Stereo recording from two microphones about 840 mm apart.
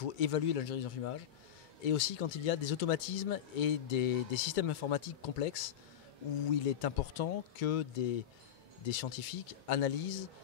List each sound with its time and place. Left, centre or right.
0.0 s speech: left
6.8 s speech: left